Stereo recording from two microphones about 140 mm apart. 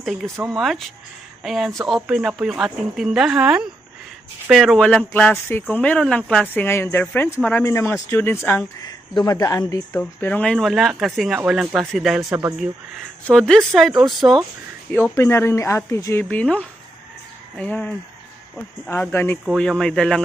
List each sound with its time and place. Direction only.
0.0 s speech: centre (ahead or behind)
0.3 s speech: 25° right (ahead or behind)
0.6 s speech: centre (ahead or behind); by 8.6 s 15° left (ahead or behind)
8.8 s speech: 30° left (ahead or behind)
9.9 s speech: 10° left (ahead or behind)
12.3 s a man's voice: 15° right (ahead or behind)
13.3 s speech: 5° left (ahead or behind)
14.9 s speech: 20° left (ahead or behind)
16.3 s speech: 10° left (ahead or behind)
19.5 s speech: 5° left (ahead or behind)